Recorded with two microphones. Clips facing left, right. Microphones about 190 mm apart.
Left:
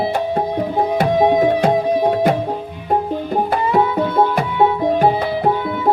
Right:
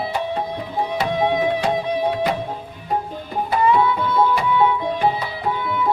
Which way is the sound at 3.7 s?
45° left (ahead or behind).